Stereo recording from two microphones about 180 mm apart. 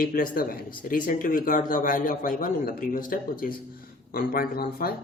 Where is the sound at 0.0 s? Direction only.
50° left (ahead or behind).